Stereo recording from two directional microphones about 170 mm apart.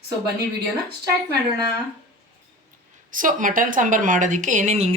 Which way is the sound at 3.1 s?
50° right (ahead or behind).